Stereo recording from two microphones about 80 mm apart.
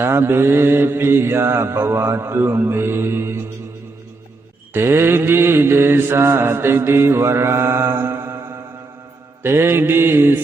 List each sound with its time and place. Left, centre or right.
0.0 s mantra: right
4.7 s mantra: right